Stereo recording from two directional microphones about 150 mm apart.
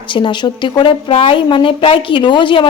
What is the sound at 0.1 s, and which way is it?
Speech, 30° left (ahead or behind).